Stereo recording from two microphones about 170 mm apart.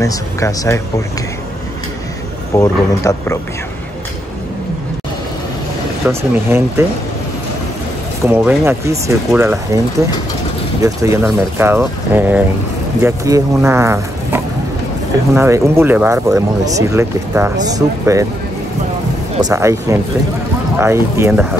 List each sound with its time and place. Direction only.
0.0 s speech: 20° left (ahead or behind)
2.5 s speech: 20° left (ahead or behind)
6.0 s speech: 15° right (ahead or behind)
8.3 s speech: 10° right (ahead or behind)
19.4 s speech: 20° right (ahead or behind)